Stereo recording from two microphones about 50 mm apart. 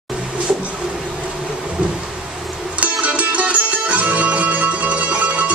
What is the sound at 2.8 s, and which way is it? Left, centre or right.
Music, right.